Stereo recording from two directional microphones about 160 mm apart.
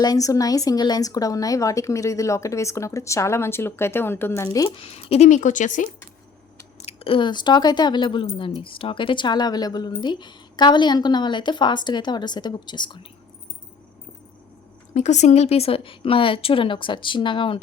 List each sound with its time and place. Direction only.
0.0 s speech: 20° left (ahead or behind)
5.0 s speech: 40° left (ahead or behind)
6.8 s speech: 35° left (ahead or behind)
14.9 s a woman's voice: 45° left (ahead or behind); by 17.6 s 30° left (ahead or behind)